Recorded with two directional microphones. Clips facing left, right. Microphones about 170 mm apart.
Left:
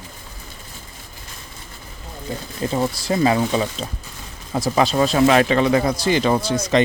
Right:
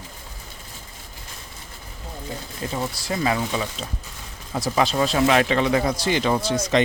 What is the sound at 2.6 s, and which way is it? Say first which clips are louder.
Speech: left 7 dB; 30° left (ahead or behind).